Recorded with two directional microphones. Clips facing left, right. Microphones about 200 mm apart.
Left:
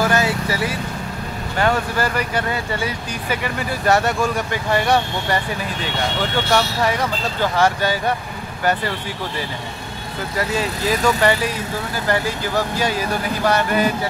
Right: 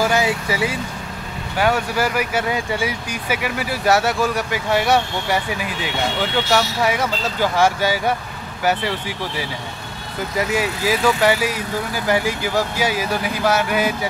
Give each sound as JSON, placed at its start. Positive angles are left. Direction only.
{"t": 0.0, "sound": "vehicle", "side_deg": -10}
{"t": 1.6, "sound": "speech", "side_deg": -10}
{"t": 10.3, "sound": "speech", "side_deg": -10}